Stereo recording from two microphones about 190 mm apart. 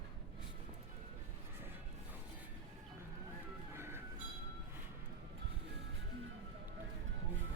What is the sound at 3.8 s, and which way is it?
Train, 10° right (ahead or behind).